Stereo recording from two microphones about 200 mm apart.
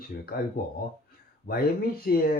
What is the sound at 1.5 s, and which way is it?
Speech, 50° left (ahead or behind).